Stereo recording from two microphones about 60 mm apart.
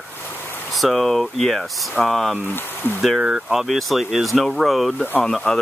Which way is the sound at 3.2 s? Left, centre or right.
Centre.